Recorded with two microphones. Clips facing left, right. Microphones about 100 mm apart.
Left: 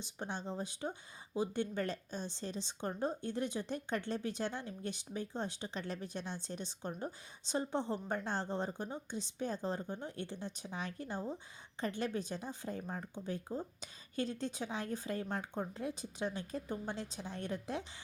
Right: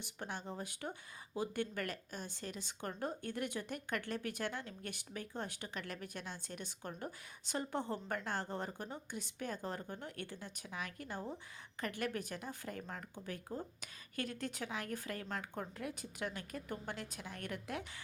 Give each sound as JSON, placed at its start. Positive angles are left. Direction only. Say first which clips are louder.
{"t": 0.2, "sound": "a woman's voice", "louder": "left 3 dB", "side_deg": 20}